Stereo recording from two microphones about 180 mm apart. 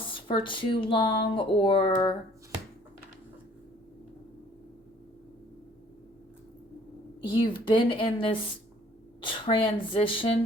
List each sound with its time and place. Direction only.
0.1 s speech: 30° left (ahead or behind)
7.3 s speech: 25° left (ahead or behind)
9.2 s a sound: 30° left (ahead or behind)
9.6 s speech: 30° left (ahead or behind)